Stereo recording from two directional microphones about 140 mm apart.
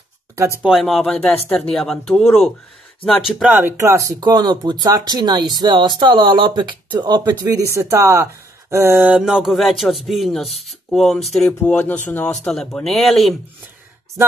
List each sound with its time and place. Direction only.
0.6 s speech: centre (ahead or behind)
3.3 s speech: 10° right (ahead or behind)